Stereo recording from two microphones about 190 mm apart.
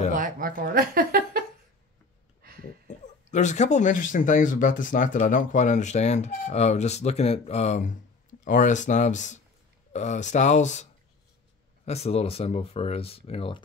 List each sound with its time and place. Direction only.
0.1 s speech: 45° right (ahead or behind)
3.3 s speech: 40° left (ahead or behind)